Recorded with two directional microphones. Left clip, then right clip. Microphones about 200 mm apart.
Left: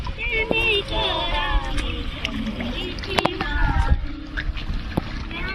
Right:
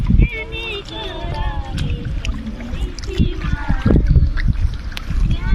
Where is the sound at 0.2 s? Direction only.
60° right (ahead or behind).